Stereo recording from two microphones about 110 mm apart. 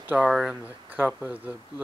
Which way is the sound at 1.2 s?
15° right (ahead or behind).